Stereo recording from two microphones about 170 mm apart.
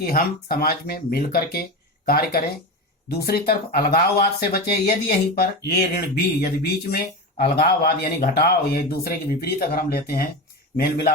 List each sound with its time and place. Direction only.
0.0 s speech: 60° left (ahead or behind)